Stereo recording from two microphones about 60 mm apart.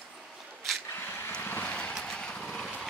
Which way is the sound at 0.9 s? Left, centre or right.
Left.